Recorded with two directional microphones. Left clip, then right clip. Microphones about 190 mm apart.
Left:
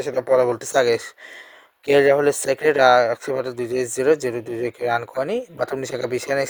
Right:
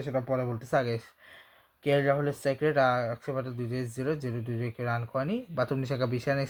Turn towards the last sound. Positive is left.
turn(degrees=40)  # may be behind; listen again after turning